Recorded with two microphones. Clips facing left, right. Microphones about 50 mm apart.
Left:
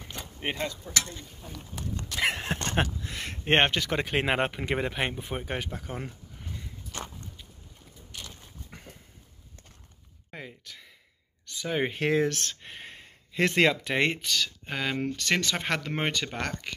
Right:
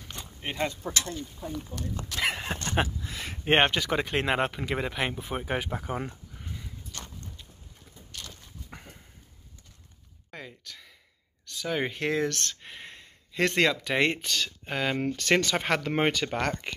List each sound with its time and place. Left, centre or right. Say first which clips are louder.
0.5 s speech: left 3 dB; left
2.0 s a sound: left 2 dB; centre
2.7 s speech: right 3 dB; centre
6.9 s walk: left 6 dB; left
8.2 s dog: even; centre
8.6 s dog: right 2 dB; centre
10.3 s a sound: even; centre
11.9 s speech: left 2 dB; centre
12.6 s a sound: even; centre
13.0 s speech: even; centre
15.1 s speech: right 5 dB; centre
15.5 s speech: right 3 dB; centre